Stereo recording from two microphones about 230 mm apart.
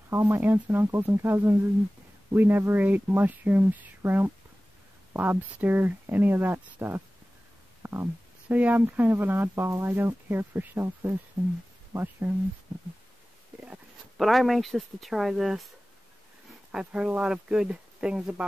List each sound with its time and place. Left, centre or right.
0.1 s speech: centre
13.6 s speech: centre
16.7 s speech: centre